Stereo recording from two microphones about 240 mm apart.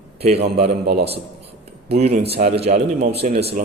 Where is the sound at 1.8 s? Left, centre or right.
Right.